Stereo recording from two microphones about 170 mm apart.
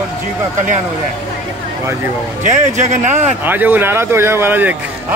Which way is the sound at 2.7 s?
45° right (ahead or behind).